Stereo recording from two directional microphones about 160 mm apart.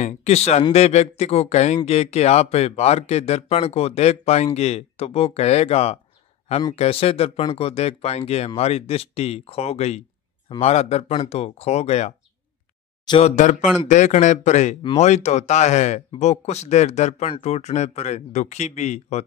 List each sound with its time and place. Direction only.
0.0 s speech: 40° left (ahead or behind)
13.2 s speech: 50° left (ahead or behind)